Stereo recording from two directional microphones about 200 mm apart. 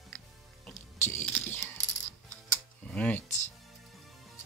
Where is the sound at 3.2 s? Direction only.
35° left (ahead or behind).